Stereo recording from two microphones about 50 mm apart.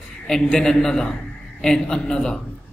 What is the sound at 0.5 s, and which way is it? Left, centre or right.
A man's voice, centre.